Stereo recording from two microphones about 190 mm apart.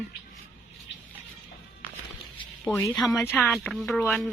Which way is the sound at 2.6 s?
10° left (ahead or behind).